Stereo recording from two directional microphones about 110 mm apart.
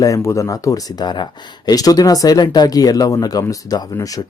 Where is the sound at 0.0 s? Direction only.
30° left (ahead or behind).